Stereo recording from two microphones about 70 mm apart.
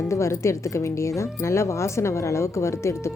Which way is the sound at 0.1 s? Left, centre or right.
Left.